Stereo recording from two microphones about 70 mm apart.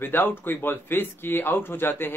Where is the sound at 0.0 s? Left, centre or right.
Left.